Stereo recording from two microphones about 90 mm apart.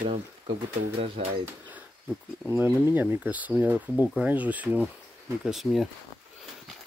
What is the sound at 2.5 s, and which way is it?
Speech, 25° right (ahead or behind).